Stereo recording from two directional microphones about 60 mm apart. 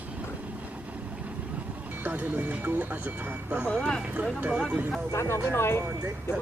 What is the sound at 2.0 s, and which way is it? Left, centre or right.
Speech, right.